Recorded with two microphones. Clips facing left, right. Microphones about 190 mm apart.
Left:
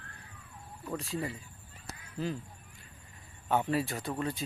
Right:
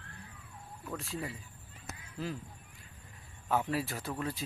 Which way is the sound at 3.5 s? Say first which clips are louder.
Left 3 dB; centre (ahead or behind).